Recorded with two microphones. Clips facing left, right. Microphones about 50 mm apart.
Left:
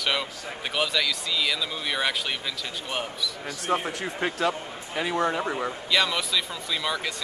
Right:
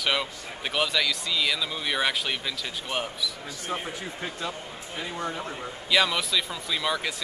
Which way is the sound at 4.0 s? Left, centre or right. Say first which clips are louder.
Left 7 dB; left.